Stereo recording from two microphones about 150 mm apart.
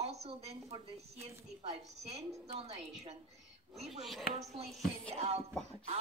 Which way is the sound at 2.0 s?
45° right (ahead or behind).